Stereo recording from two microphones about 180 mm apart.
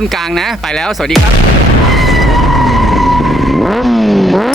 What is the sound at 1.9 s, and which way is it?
Vehicle, centre (ahead or behind).